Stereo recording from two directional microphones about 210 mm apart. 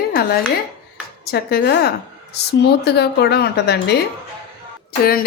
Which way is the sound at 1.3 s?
50° left (ahead or behind).